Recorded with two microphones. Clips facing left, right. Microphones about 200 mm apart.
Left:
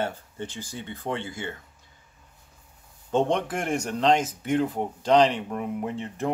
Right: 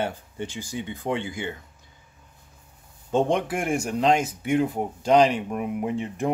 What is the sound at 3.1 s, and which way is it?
Speech, 10° right (ahead or behind).